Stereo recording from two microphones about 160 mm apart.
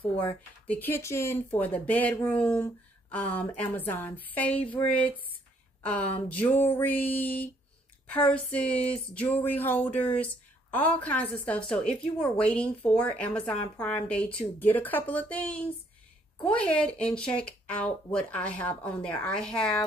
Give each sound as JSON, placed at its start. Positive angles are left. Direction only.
{"t": 0.0, "sound": "speech", "side_deg": 35}
{"t": 0.7, "sound": "speech", "side_deg": 10}
{"t": 5.8, "sound": "a sound", "side_deg": 10}
{"t": 6.2, "sound": "a woman's voice", "side_deg": 10}